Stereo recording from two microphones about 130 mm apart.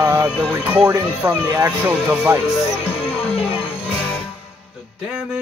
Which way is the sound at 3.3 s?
50° left (ahead or behind).